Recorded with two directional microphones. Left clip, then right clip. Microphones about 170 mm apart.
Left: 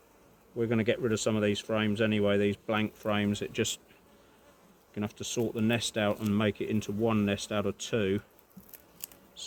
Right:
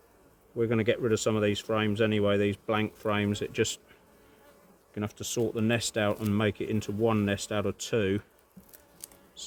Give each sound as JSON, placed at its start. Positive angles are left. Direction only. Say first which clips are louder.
{"t": 0.5, "sound": "speech", "louder": "right 2 dB", "side_deg": -70}
{"t": 4.9, "sound": "speech", "louder": "right 2 dB", "side_deg": -70}